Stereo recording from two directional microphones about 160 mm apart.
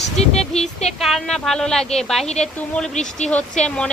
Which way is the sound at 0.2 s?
40° left (ahead or behind).